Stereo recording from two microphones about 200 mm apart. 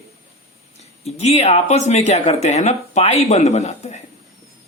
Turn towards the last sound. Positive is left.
turn(degrees=30)  # may be behind; listen again after turning